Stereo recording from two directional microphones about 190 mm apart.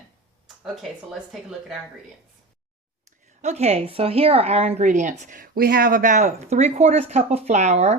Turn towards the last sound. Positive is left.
turn(degrees=-35)  # may be behind; listen again after turning